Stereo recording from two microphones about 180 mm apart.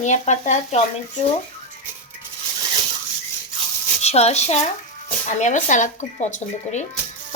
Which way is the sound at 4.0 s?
35° left (ahead or behind).